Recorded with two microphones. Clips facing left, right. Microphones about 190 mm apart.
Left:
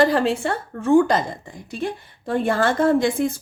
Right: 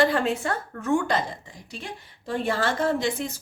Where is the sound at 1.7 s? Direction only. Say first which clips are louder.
Left 11 dB; 55° left (ahead or behind).